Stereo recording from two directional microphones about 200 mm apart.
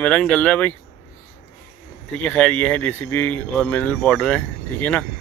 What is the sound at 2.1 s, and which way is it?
A man's voice, 5° left (ahead or behind).